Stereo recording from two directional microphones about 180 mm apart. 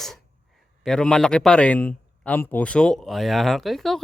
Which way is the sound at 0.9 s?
5° left (ahead or behind).